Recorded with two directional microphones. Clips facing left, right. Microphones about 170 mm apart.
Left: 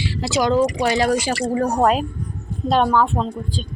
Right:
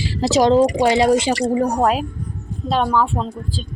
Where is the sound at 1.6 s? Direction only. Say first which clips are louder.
Even; 15° right (ahead or behind).